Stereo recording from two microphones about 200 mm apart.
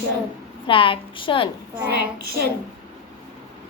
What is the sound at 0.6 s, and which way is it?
Speech, 25° left (ahead or behind).